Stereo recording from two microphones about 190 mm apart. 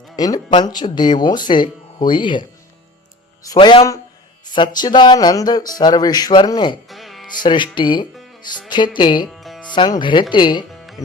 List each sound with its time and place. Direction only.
0.2 s speech: 20° left (ahead or behind)
6.8 s music: centre (ahead or behind)
7.4 s speech: 25° left (ahead or behind)
8.1 s music: centre (ahead or behind)
8.4 s speech: 25° left (ahead or behind)
9.3 s music: centre (ahead or behind)
9.6 s speech: 25° left (ahead or behind)
10.7 s music: centre (ahead or behind)